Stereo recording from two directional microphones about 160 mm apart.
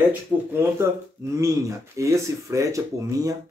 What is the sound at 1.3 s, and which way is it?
Speech, 20° right (ahead or behind).